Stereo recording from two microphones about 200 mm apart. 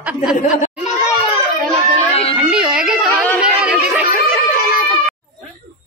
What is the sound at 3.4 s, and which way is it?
Chatter, 5° right (ahead or behind).